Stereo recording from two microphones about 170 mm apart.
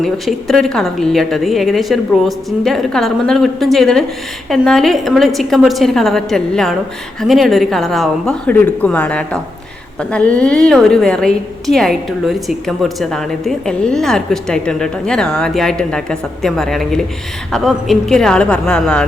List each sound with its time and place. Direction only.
0.0 s a woman's voice: centre (ahead or behind)